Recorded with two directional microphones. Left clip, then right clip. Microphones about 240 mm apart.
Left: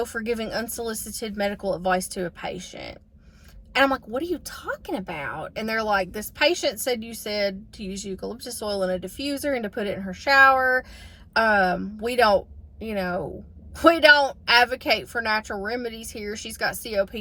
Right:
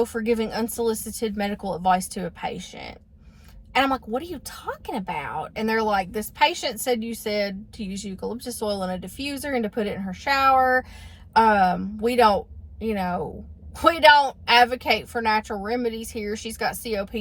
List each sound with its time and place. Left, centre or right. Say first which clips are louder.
0.0 s a woman's voice: right 4 dB; centre